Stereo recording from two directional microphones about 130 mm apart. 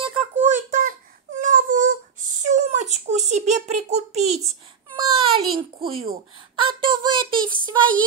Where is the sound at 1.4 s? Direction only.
80° right.